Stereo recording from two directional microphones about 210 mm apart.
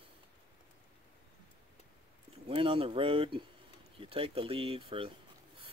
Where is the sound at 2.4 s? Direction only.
25° right (ahead or behind).